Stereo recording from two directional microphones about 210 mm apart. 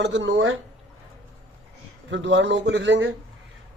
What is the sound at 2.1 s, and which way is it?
Speech, 60° right (ahead or behind).